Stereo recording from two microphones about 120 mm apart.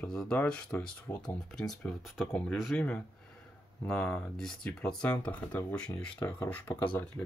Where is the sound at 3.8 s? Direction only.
10° left (ahead or behind).